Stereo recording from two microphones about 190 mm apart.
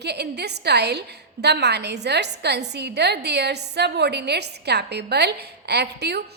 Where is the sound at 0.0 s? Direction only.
60° right (ahead or behind).